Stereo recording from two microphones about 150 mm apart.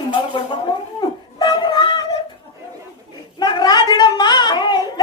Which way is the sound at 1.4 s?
30° left (ahead or behind).